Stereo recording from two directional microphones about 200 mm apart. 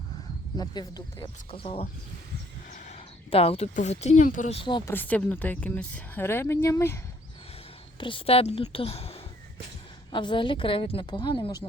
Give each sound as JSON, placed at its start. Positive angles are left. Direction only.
{"t": 0.5, "sound": "a woman's voice", "side_deg": 20}
{"t": 4.9, "sound": "speech", "side_deg": 10}
{"t": 7.9, "sound": "a woman's voice", "side_deg": 25}